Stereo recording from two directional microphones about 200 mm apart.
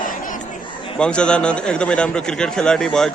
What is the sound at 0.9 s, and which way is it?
A man's voice, 5° left (ahead or behind).